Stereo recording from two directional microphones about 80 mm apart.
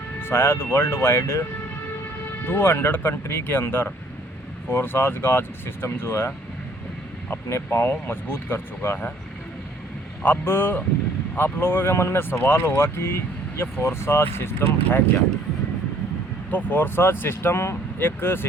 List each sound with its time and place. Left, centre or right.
0.2 s speech: left
2.5 s speech: left
10.2 s speech: left
16.5 s speech: left